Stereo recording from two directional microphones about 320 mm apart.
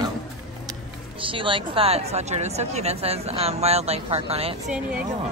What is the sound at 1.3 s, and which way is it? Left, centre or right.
A woman's voice, centre.